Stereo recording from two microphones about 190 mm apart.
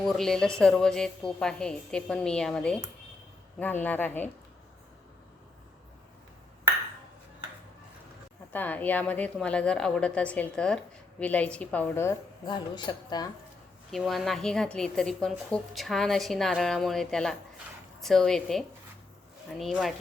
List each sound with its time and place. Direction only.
0.0 s a woman's voice: centre (ahead or behind)
8.5 s a woman's voice: 10° left (ahead or behind)
12.5 s a woman's voice: 25° left (ahead or behind)
13.9 s speech: centre (ahead or behind)